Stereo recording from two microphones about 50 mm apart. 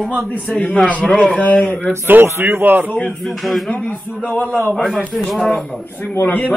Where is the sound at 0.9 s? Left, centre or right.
Left.